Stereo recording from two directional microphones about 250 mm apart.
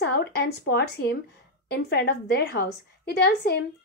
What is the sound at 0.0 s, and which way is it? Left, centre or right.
A woman's voice, left.